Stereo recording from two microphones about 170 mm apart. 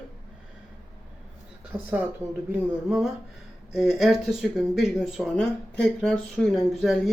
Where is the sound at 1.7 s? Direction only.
20° right (ahead or behind).